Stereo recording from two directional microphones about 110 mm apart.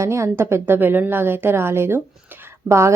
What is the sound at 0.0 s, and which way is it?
A woman's voice, 25° right (ahead or behind).